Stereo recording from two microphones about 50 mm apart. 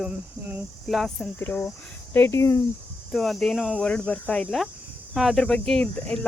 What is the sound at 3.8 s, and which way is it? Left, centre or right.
Speech, centre.